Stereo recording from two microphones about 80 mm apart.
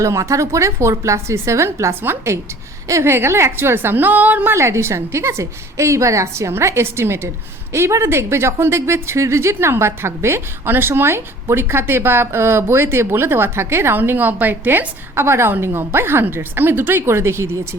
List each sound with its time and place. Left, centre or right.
0.0 s a woman's voice: right
4.5 s speech: right